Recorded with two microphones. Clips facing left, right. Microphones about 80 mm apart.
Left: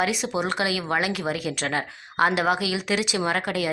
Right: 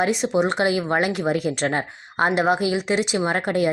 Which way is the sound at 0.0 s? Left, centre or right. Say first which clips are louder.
Right 5 dB; right.